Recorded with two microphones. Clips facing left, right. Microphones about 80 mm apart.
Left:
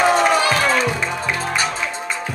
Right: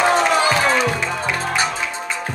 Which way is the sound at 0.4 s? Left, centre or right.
Centre.